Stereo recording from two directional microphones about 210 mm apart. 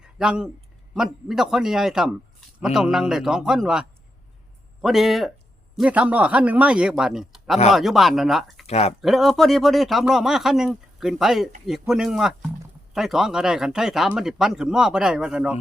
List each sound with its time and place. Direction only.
0.0 s speech: 5° right (ahead or behind)
8.6 s speech: 30° left (ahead or behind)
9.0 s speech: centre (ahead or behind)